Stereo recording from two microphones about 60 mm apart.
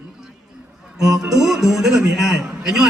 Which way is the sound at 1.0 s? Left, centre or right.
Centre.